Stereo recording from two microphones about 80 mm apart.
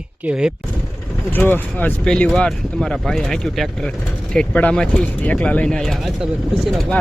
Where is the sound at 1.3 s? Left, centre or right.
Left.